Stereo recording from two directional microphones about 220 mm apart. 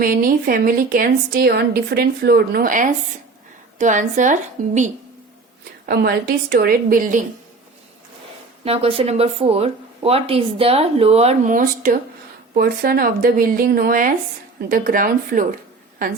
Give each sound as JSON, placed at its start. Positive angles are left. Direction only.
{"t": 0.0, "sound": "a woman's voice", "side_deg": -40}
{"t": 5.8, "sound": "a woman's voice", "side_deg": -45}
{"t": 8.6, "sound": "a woman's voice", "side_deg": -25}